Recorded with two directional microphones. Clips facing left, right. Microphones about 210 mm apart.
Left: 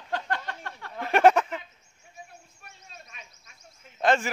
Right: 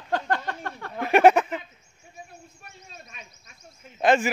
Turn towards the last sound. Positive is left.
turn(degrees=-15)  # may be behind; listen again after turning